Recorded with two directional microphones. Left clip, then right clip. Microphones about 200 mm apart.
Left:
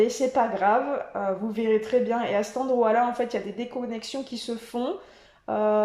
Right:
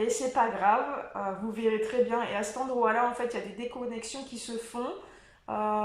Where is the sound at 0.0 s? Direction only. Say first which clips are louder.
Left 4 dB; 30° left (ahead or behind).